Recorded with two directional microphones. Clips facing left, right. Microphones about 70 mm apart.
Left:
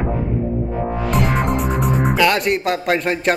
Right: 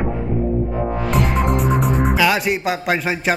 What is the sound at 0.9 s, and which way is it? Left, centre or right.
Speech, centre.